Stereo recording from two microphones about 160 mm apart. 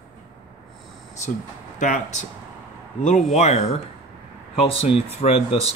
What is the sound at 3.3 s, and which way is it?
Speech, 40° left (ahead or behind).